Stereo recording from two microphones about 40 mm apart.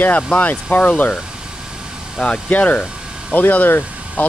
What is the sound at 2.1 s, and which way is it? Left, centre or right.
Speech, left.